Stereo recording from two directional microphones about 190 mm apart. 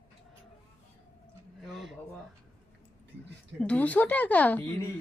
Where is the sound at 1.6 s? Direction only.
Centre (ahead or behind).